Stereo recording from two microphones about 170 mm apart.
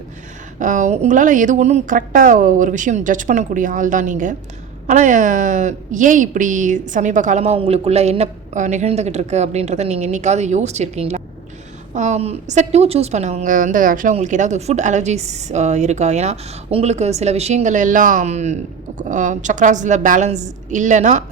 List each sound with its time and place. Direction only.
0.6 s a woman's voice: 45° right (ahead or behind)